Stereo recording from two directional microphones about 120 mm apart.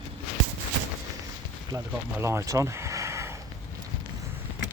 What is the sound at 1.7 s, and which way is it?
Speech, 20° right (ahead or behind).